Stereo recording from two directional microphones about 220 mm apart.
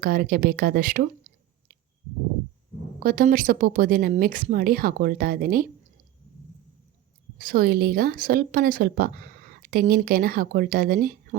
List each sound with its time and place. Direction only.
0.0 s speech: 40° right (ahead or behind)
3.0 s speech: 40° right (ahead or behind)
7.3 s speech: 40° right (ahead or behind)